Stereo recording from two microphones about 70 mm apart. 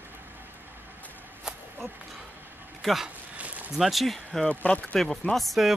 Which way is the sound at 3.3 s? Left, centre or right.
Centre.